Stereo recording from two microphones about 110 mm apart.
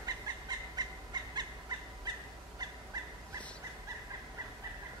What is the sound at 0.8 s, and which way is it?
Bird, 40° right (ahead or behind).